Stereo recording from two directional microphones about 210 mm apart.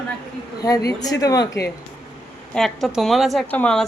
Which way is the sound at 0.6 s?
15° left (ahead or behind).